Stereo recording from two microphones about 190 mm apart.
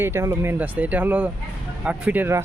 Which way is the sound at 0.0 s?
15° right (ahead or behind).